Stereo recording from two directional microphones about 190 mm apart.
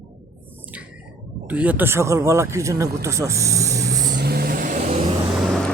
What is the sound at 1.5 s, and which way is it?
Speech, 10° right (ahead or behind).